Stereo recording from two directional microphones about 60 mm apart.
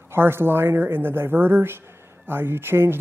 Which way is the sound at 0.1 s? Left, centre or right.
Right.